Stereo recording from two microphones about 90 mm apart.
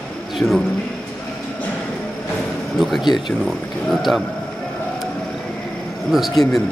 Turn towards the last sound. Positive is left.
turn(degrees=0)  # may be behind; listen again after turning